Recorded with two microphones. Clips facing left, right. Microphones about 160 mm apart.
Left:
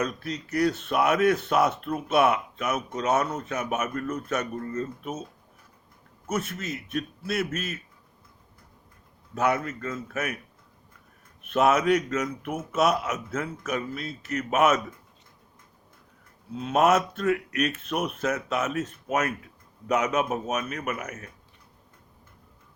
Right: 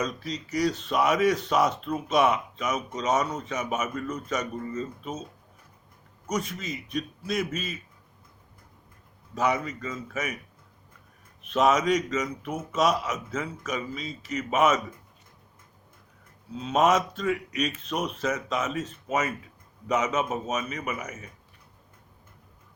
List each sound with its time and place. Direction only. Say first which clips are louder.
0.0 s speech: left 1 dB; 10° left (ahead or behind)
6.2 s a man's voice: left 1 dB; 5° left (ahead or behind)
9.3 s a man's voice: left 1 dB; 5° left (ahead or behind)
11.4 s speech: left 1 dB; 10° left (ahead or behind)
16.6 s speech: left 1 dB; 10° left (ahead or behind)